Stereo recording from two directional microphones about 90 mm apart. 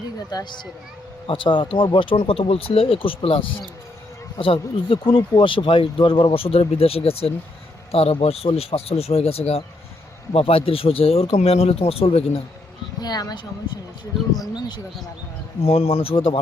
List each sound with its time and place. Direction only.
0.3 s speech: 50° left (ahead or behind)
1.3 s speech: 70° left (ahead or behind); by 3.4 s 90° left
4.4 s speech: 80° left
13.0 s speech: 50° left (ahead or behind)
15.6 s speech: 90° left